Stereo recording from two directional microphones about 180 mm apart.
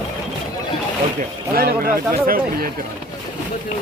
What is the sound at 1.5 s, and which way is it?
Speech, 55° right (ahead or behind).